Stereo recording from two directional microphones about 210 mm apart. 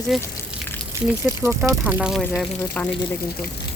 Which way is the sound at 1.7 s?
5° right (ahead or behind).